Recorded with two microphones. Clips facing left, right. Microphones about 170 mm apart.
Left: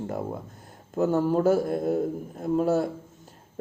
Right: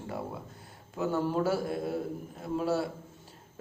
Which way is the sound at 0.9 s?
45° left (ahead or behind).